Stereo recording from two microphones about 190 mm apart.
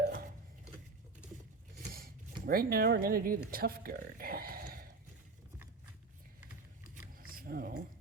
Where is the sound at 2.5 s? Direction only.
50° right (ahead or behind).